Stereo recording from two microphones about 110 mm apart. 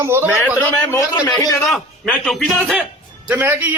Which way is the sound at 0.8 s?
15° left (ahead or behind).